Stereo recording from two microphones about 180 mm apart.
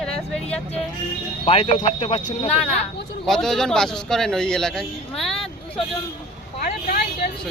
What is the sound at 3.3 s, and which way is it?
Speech, centre (ahead or behind).